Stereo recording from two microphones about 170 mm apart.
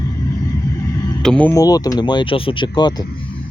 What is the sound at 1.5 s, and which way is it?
Speech, 20° left (ahead or behind).